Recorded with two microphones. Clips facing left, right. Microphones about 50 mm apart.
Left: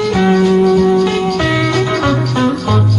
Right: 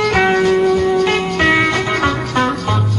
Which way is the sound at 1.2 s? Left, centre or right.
Right.